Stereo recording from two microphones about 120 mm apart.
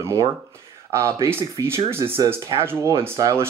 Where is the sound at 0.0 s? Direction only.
25° right (ahead or behind).